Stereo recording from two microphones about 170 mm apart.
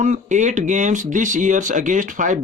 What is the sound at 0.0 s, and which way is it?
Speech, 45° right (ahead or behind).